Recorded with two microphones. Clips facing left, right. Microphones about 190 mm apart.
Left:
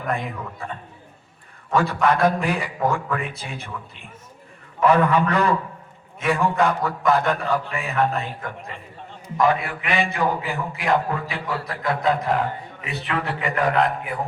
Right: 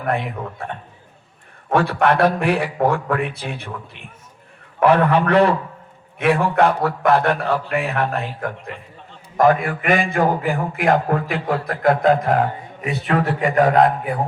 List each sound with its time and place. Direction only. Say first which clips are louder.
0.0 s a man's voice: right 4 dB; 65° right (ahead or behind)
1.7 s a man's voice: right 3 dB; 65° right (ahead or behind)
4.8 s a man's voice: right 2 dB; 60° right (ahead or behind)
9.4 s a man's voice: right 5 dB; 50° right (ahead or behind)